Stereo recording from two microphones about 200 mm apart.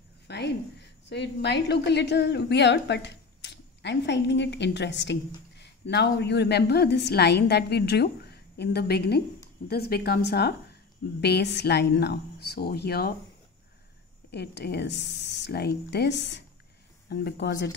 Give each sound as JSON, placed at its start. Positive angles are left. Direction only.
{"t": 0.3, "sound": "a woman's voice", "side_deg": 60}
{"t": 14.3, "sound": "a woman's voice", "side_deg": 55}